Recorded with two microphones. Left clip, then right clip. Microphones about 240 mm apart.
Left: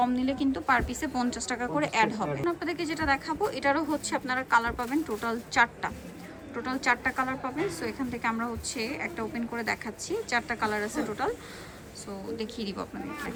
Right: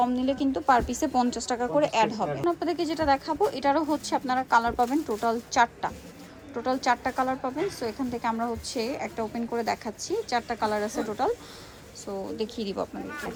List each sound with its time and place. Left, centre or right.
0.0 s speech: centre
12.4 s speech: centre